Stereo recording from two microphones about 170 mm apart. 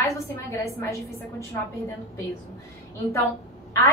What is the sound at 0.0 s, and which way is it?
Speech, 15° left (ahead or behind).